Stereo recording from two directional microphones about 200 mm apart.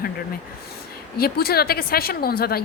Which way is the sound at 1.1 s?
50° left (ahead or behind).